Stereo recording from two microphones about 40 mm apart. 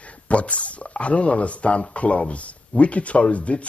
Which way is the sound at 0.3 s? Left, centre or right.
Left.